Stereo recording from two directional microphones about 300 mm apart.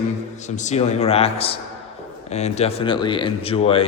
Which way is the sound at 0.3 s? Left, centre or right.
Left.